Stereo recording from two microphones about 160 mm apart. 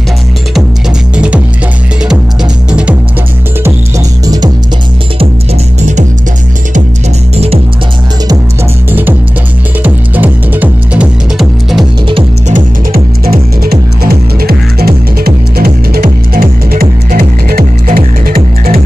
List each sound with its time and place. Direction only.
1.1 s music: 5° right (ahead or behind)
5.8 s music: 50° right (ahead or behind)
7.3 s music: 40° right (ahead or behind)
9.8 s music: 10° right (ahead or behind)
12.1 s music: 35° right (ahead or behind)
12.5 s music: 65° right (ahead or behind)